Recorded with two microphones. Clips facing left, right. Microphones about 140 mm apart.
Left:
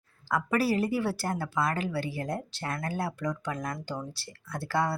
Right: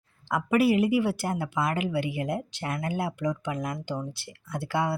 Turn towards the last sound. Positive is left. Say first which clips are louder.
# right 1 dB
turn(degrees=-20)  # may be behind; listen again after turning